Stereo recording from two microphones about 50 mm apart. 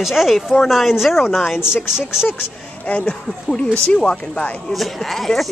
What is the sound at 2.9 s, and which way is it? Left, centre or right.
Speech, left.